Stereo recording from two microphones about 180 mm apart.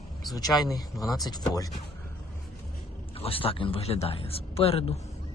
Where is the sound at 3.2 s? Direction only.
30° left (ahead or behind).